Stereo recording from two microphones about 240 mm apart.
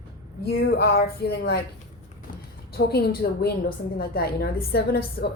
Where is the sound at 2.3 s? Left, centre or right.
Left.